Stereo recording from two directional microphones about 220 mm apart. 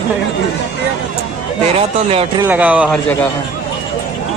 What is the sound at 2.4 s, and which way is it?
Speech, 5° right (ahead or behind).